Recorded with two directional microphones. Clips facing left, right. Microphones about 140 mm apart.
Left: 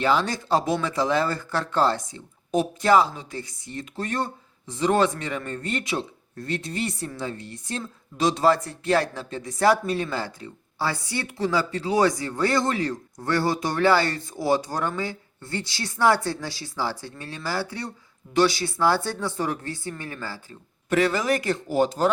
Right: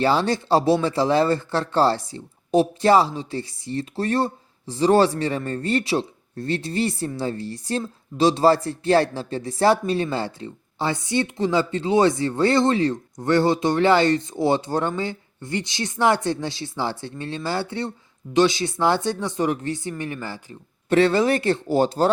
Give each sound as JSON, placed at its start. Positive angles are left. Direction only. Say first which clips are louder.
{"t": 0.0, "sound": "speech", "louder": "right 3 dB", "side_deg": -30}